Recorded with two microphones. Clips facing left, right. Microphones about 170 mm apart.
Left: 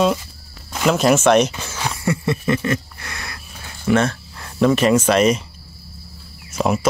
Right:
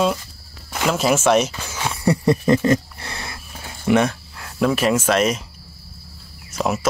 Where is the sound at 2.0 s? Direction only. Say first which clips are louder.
Right 4 dB; 40° right (ahead or behind); by 4.2 s 15° right (ahead or behind).